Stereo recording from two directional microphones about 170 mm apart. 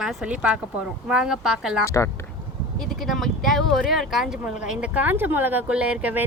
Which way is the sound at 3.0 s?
Centre (ahead or behind).